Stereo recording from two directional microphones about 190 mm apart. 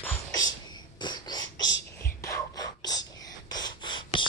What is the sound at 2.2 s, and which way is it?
Whispering, 20° left (ahead or behind).